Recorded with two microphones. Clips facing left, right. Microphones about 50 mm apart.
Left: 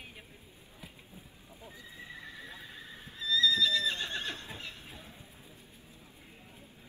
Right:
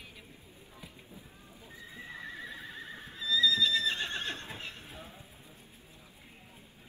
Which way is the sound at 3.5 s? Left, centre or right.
Right.